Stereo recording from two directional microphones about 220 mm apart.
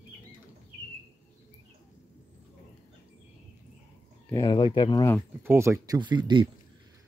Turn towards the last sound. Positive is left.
turn(degrees=-20)  # may be behind; listen again after turning